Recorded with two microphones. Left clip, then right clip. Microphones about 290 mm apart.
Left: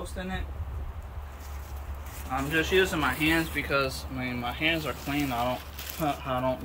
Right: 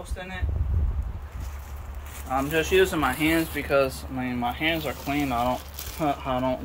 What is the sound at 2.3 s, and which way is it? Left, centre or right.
Speech, centre.